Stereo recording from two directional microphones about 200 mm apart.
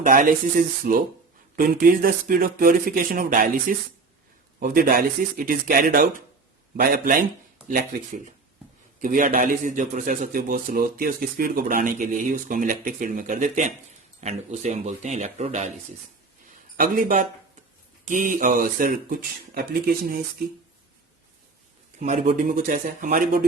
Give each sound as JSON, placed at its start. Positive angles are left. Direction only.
{"t": 0.0, "sound": "a man's voice", "side_deg": -40}
{"t": 16.7, "sound": "speech", "side_deg": -45}
{"t": 21.9, "sound": "speech", "side_deg": -40}